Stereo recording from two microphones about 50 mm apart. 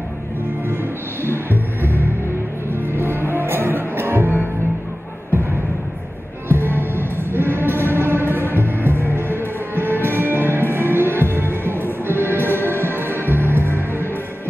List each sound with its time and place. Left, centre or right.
1.2 s music: right
6.5 s music: right